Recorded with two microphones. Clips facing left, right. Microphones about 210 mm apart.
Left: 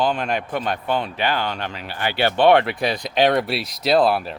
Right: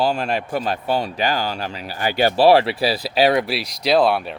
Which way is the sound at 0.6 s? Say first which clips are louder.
Right 1 dB; 35° right (ahead or behind).